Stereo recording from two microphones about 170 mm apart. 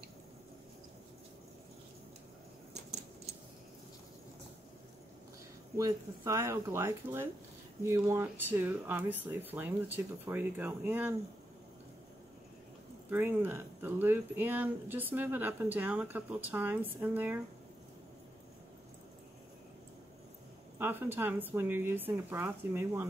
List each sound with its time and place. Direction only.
5.8 s speech: 20° right (ahead or behind)
13.1 s speech: 10° right (ahead or behind)
20.7 s speech: 10° right (ahead or behind)